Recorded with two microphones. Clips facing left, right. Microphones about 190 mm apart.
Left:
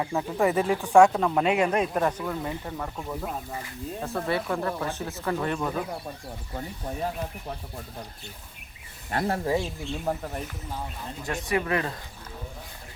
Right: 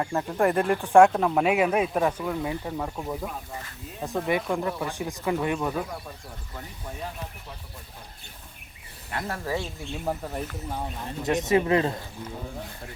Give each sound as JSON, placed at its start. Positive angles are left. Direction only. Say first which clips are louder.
{"t": 0.0, "sound": "speech", "louder": "right 1 dB", "side_deg": 0}
{"t": 9.0, "sound": "speech", "louder": "left 5 dB", "side_deg": 35}
{"t": 9.9, "sound": "speech", "louder": "even", "side_deg": -5}
{"t": 11.2, "sound": "speech", "louder": "right 6 dB", "side_deg": -20}